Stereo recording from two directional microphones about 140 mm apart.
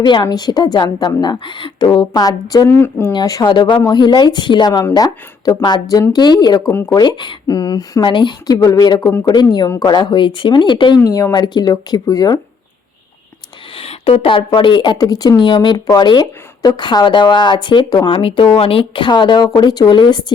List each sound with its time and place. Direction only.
0.0 s speech: 35° left (ahead or behind)
2.6 s speech: 15° left (ahead or behind)
3.1 s speech: 30° left (ahead or behind)
13.7 s speech: 40° left (ahead or behind)